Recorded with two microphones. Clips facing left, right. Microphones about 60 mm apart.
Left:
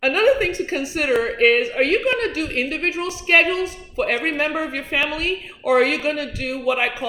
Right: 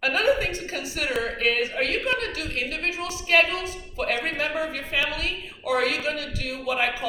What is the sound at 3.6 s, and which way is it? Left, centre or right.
A woman's voice, left.